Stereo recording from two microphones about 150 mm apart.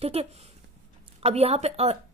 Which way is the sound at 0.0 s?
40° right (ahead or behind).